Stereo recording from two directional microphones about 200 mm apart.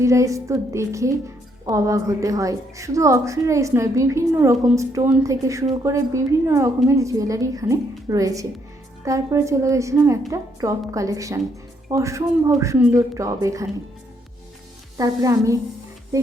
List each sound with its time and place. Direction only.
0.0 s a woman's voice: 15° right (ahead or behind)
14.9 s a woman's voice: 20° right (ahead or behind)